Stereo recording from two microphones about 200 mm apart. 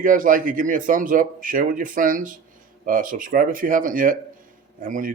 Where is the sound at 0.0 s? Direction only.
40° right (ahead or behind).